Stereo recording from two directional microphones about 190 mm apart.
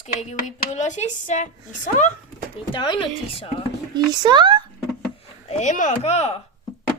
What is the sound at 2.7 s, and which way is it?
Speech, 25° left (ahead or behind).